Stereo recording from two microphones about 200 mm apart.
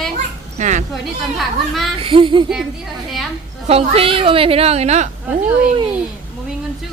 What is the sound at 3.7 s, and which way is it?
Speech, 30° right (ahead or behind).